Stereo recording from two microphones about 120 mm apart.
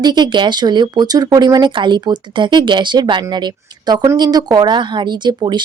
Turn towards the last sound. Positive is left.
turn(degrees=-40)  # may be behind; listen again after turning